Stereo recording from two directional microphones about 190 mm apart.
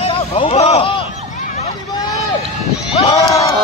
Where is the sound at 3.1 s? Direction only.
15° left (ahead or behind).